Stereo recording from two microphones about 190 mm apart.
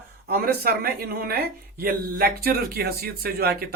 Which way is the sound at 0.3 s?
55° right (ahead or behind).